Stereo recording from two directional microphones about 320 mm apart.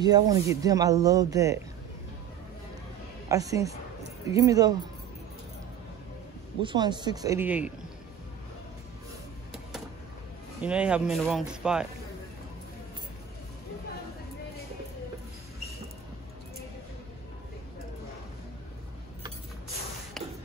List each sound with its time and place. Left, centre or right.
0.0 s speech: centre
3.3 s speech: centre
6.6 s speech: centre
10.6 s speech: centre
20.2 s music: centre